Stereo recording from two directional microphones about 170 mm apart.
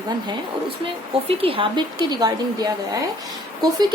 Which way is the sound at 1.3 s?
35° right (ahead or behind).